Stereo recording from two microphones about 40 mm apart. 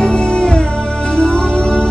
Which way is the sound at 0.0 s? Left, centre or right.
Left.